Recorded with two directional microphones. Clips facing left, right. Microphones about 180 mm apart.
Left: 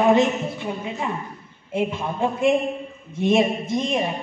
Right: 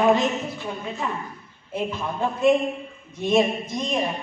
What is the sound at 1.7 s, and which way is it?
A man's voice, 25° left (ahead or behind).